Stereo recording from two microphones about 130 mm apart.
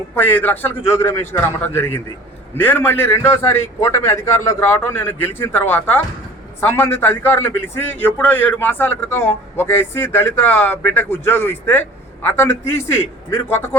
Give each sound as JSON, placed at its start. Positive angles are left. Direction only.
{"t": 0.1, "sound": "a man's voice", "side_deg": 15}